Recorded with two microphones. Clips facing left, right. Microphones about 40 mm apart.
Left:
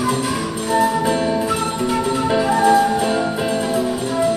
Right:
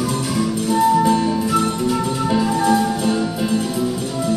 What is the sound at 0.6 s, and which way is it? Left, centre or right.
Music, centre.